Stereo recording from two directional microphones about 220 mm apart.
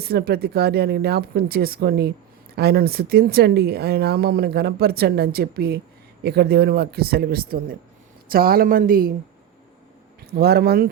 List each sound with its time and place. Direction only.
0.0 s speech: 45° right (ahead or behind)
10.2 s speech: 45° right (ahead or behind)